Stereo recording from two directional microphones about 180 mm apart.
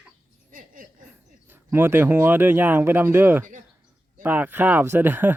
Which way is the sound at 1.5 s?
10° right (ahead or behind).